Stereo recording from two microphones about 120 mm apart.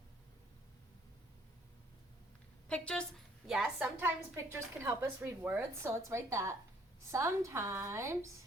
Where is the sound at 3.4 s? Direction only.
5° right (ahead or behind).